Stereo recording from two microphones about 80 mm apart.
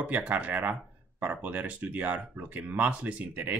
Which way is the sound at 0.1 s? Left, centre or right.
Centre.